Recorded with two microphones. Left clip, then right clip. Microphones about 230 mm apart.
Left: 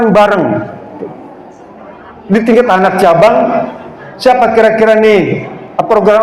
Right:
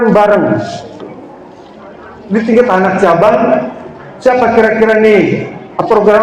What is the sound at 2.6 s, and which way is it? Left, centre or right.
A man's voice, left.